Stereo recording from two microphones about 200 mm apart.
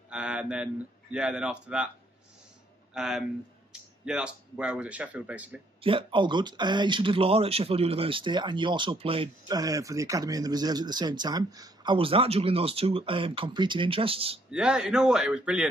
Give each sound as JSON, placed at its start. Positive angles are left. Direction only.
{"t": 0.1, "sound": "speech", "side_deg": -5}
{"t": 2.9, "sound": "speech", "side_deg": 0}
{"t": 5.8, "sound": "speech", "side_deg": -25}
{"t": 14.5, "sound": "speech", "side_deg": -5}